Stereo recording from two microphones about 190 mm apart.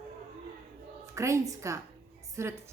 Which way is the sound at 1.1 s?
15° right (ahead or behind).